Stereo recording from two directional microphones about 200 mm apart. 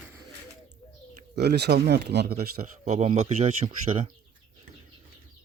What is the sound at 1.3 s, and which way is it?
Speech, 55° right (ahead or behind).